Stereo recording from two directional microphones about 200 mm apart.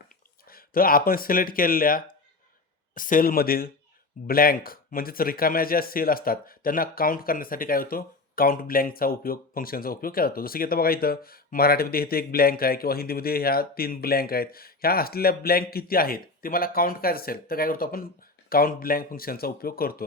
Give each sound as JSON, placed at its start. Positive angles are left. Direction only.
{"t": 0.4, "sound": "speech", "side_deg": 45}